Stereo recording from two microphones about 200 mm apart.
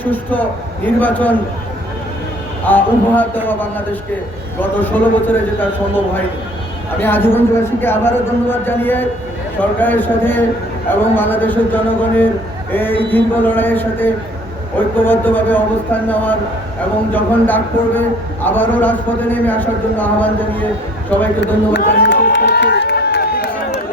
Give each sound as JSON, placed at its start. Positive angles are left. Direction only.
{"t": 0.0, "sound": "a man's voice", "side_deg": 10}
{"t": 2.6, "sound": "a man's voice", "side_deg": 10}
{"t": 7.0, "sound": "a man's voice", "side_deg": 10}
{"t": 21.7, "sound": "crowd", "side_deg": 60}